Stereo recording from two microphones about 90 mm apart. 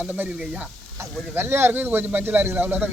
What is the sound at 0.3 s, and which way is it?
Speech, 10° right (ahead or behind).